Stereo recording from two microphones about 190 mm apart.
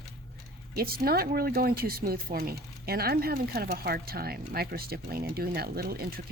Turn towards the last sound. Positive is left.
turn(degrees=-55)  # may be behind; listen again after turning